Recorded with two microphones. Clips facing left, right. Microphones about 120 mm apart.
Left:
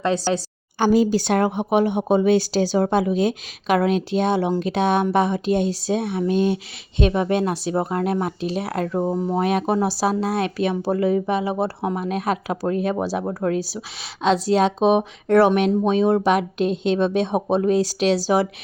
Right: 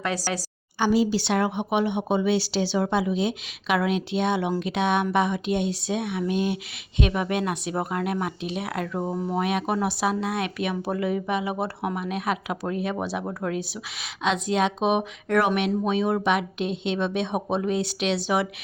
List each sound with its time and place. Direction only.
0.0 s speech: 25° left (ahead or behind)
0.8 s speech: 45° left (ahead or behind)
9.0 s speech: 25° left (ahead or behind)